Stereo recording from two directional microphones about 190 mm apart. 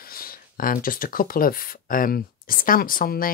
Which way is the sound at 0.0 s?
50° left (ahead or behind).